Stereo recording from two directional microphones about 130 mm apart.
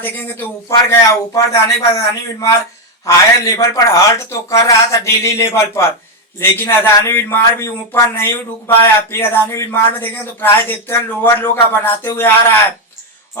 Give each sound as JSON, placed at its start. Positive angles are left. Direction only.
{"t": 0.0, "sound": "a man's voice", "side_deg": 15}
{"t": 0.9, "sound": "a man's voice", "side_deg": 25}